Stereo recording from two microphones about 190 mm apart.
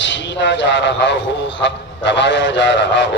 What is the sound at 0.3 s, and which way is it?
A man's voice, 70° left (ahead or behind).